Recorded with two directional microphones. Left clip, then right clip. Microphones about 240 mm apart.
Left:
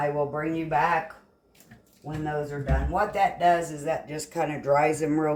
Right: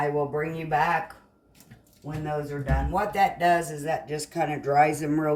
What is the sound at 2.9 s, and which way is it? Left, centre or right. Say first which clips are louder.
Speech: even; centre.